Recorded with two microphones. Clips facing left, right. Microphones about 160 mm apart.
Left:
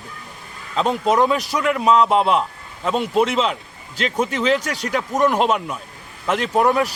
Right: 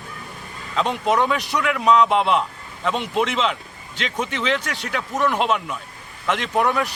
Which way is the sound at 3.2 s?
40° left (ahead or behind).